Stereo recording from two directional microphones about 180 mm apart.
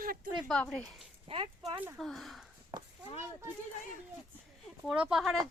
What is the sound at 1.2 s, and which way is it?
Speech, 30° right (ahead or behind).